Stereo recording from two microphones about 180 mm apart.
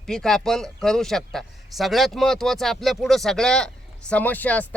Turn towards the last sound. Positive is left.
turn(degrees=10)  # may be behind; listen again after turning